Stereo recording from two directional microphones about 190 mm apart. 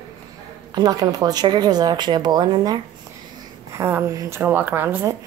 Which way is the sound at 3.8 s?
15° right (ahead or behind).